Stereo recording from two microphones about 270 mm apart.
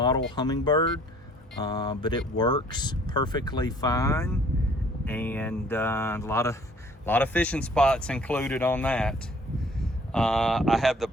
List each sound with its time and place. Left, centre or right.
0.0 s speech: centre